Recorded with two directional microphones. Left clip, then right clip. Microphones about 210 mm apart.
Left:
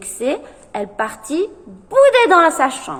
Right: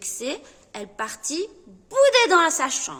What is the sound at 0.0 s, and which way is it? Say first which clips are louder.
A woman's voice: left 9 dB; 25° right (ahead or behind).